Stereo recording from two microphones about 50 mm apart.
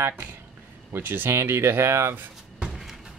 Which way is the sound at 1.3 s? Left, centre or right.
Right.